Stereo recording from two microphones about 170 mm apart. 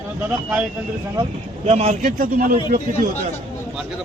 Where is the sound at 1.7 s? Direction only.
40° right (ahead or behind).